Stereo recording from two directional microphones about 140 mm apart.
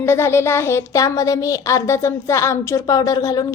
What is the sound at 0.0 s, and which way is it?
A woman's voice, 20° left (ahead or behind).